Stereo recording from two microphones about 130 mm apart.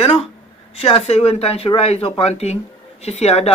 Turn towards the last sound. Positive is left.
turn(degrees=55)  # may be behind; listen again after turning